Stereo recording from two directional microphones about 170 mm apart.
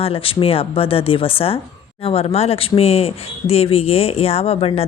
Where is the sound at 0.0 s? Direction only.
35° left (ahead or behind).